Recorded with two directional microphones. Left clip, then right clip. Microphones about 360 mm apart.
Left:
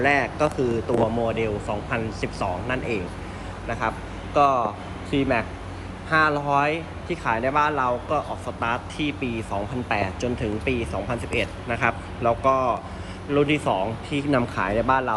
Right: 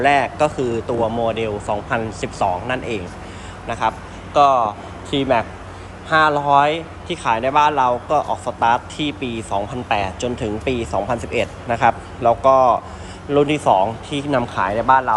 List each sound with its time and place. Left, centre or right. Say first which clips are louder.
0.0 s speech: right 5 dB; centre
14.1 s speech: right 2 dB; right
14.3 s speech: right 5 dB; centre